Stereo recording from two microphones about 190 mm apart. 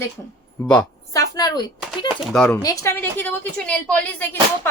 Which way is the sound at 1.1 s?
20° left (ahead or behind).